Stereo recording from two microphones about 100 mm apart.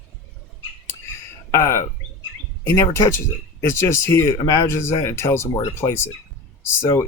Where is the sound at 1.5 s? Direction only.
30° left (ahead or behind).